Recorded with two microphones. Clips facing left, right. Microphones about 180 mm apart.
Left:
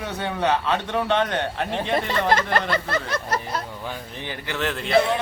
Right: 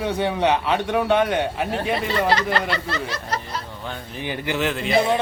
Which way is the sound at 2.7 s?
50° left (ahead or behind).